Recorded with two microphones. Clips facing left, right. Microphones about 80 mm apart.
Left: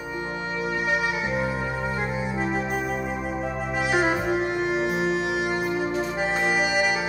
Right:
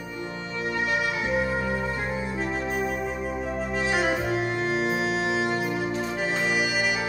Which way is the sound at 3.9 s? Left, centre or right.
Left.